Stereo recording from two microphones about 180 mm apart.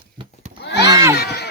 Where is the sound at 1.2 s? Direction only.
65° left (ahead or behind).